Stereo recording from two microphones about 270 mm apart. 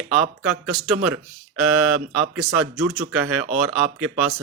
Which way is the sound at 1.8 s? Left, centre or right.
Right.